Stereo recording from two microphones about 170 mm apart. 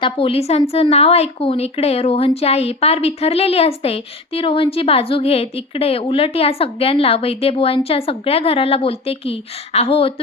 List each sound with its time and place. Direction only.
0.0 s speech: 35° left (ahead or behind)